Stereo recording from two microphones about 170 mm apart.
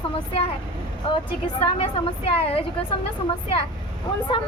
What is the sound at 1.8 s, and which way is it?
Speech, 35° left (ahead or behind).